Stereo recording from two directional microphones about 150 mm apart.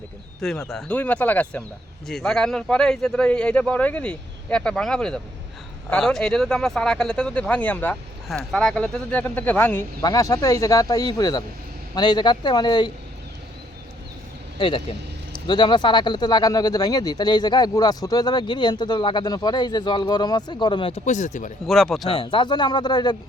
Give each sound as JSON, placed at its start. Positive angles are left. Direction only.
{"t": 0.7, "sound": "speech", "side_deg": 5}
{"t": 10.0, "sound": "speech", "side_deg": 25}
{"t": 14.6, "sound": "speech", "side_deg": 35}
{"t": 21.0, "sound": "speech", "side_deg": 50}
{"t": 21.7, "sound": "speech", "side_deg": 0}
{"t": 22.1, "sound": "speech", "side_deg": 35}